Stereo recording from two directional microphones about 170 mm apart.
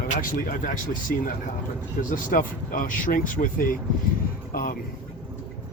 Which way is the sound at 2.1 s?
50° left (ahead or behind).